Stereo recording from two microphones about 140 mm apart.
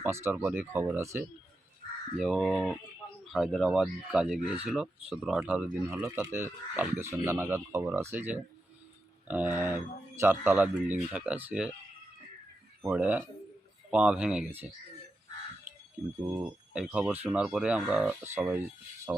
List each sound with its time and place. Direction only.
0.0 s speech: 15° right (ahead or behind)
2.1 s speech: centre (ahead or behind)
12.8 s speech: 10° right (ahead or behind)
16.4 s speech: 5° right (ahead or behind)